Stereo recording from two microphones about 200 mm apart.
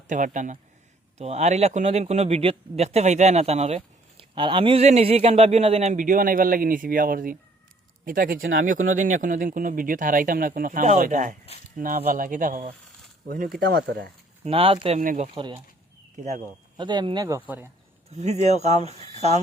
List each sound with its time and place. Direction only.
0.1 s speech: 40° right (ahead or behind)
14.4 s speech: 25° right (ahead or behind)
15.4 s speech: 20° right (ahead or behind)
16.1 s speech: 35° right (ahead or behind)
16.7 s speech: 20° right (ahead or behind)
18.1 s speech: 35° right (ahead or behind)